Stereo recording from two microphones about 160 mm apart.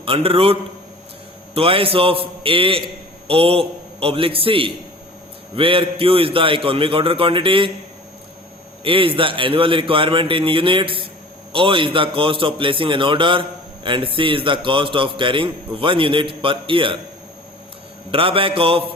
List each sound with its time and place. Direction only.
0.0 s a man's voice: 35° right (ahead or behind)
8.8 s a man's voice: 35° right (ahead or behind)
18.1 s a man's voice: 35° right (ahead or behind)